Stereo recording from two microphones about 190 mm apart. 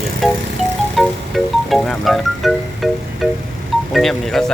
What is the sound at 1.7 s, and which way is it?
Music, centre (ahead or behind).